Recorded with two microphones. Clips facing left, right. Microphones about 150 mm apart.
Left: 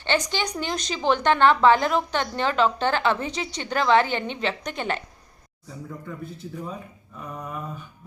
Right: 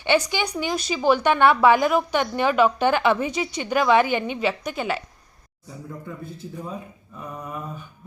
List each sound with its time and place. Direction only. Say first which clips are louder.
0.0 s a woman's voice: right 4 dB; 10° right (ahead or behind)